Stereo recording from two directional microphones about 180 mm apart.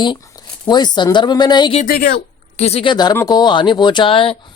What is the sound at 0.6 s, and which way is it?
Speech, 25° left (ahead or behind).